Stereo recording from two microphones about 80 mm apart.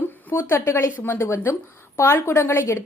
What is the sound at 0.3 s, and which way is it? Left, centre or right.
A woman's voice, left.